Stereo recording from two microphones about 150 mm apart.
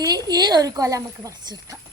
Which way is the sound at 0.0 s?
25° right (ahead or behind).